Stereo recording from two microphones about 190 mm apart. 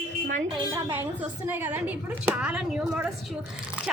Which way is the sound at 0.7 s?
10° right (ahead or behind).